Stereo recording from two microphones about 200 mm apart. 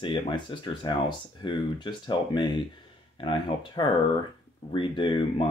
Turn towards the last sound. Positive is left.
turn(degrees=25)  # may be behind; listen again after turning